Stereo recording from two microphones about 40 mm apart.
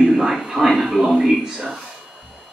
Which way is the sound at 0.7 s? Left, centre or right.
Centre.